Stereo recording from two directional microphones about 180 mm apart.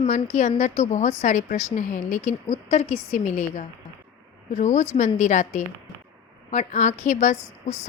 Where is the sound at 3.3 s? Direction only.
40° left (ahead or behind).